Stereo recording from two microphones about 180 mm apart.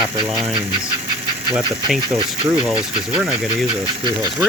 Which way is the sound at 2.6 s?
5° right (ahead or behind).